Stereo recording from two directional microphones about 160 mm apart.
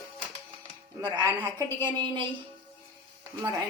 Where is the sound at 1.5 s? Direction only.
30° right (ahead or behind).